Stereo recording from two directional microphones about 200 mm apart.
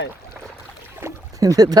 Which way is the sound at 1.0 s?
15° right (ahead or behind).